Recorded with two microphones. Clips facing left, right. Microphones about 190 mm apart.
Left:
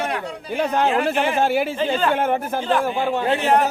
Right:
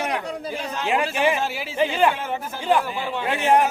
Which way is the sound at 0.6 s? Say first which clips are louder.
Left 6 dB; 60° left (ahead or behind).